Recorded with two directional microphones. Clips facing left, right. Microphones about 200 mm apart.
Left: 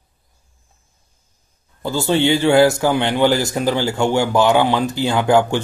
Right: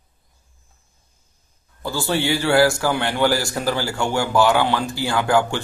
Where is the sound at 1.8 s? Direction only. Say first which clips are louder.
Left 5 dB; 20° left (ahead or behind).